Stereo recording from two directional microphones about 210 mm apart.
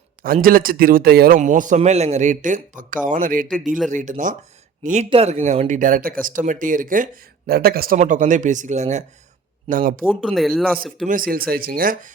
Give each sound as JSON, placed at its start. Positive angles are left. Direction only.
{"t": 0.2, "sound": "speech", "side_deg": -40}
{"t": 10.0, "sound": "speech", "side_deg": 0}
{"t": 11.1, "sound": "speech", "side_deg": -40}